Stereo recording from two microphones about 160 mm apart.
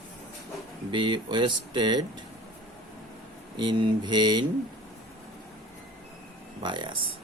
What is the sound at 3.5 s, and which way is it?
Speech, 25° right (ahead or behind).